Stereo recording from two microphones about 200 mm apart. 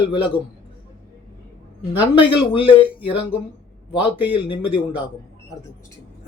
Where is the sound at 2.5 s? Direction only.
25° left (ahead or behind).